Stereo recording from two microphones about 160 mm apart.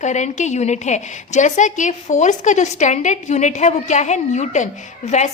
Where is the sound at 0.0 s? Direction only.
50° left (ahead or behind).